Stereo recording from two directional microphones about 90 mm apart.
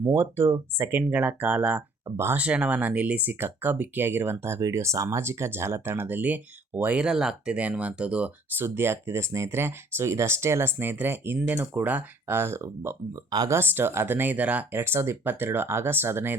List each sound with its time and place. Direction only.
0.0 s speech: 25° right (ahead or behind)
2.1 s speech: 30° right (ahead or behind)
2.4 s speech: 15° right (ahead or behind)
12.4 s speech: 30° right (ahead or behind)